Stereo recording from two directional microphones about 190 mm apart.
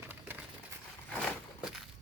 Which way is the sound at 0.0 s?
10° right (ahead or behind).